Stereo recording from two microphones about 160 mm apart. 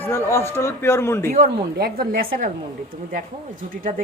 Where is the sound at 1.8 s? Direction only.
70° right (ahead or behind).